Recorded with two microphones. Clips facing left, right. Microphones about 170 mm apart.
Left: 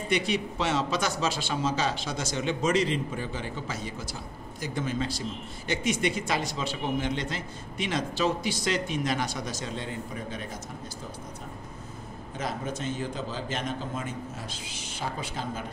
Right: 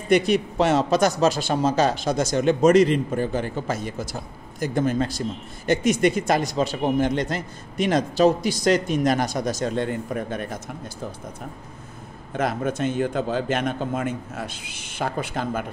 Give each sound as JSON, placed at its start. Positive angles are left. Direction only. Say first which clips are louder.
{"t": 0.1, "sound": "a man's voice", "louder": "right 9 dB", "side_deg": -50}
{"t": 12.4, "sound": "a man's voice", "louder": "right 9 dB", "side_deg": -60}